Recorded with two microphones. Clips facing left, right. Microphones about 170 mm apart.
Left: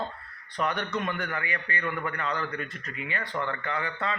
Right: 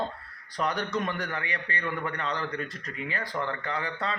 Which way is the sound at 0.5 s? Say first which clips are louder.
Even; 35° right (ahead or behind).